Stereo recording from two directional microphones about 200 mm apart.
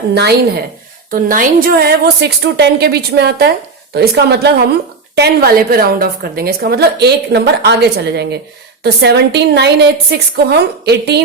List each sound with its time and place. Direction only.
0.1 s a woman's voice: 55° right (ahead or behind)
1.1 s a woman's voice: 45° right (ahead or behind)